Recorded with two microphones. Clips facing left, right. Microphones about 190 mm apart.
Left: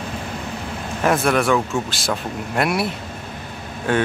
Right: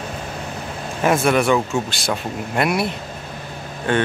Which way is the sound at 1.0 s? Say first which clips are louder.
Right 1 dB; centre (ahead or behind).